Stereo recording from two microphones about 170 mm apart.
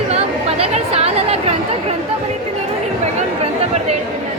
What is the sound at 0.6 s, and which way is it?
Speech, 40° right (ahead or behind).